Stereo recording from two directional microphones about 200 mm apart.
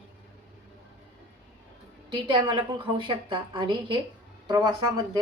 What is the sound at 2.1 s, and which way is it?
A woman's voice, 20° right (ahead or behind).